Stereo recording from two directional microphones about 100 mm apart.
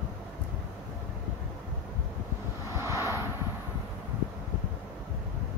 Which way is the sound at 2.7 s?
30° right (ahead or behind).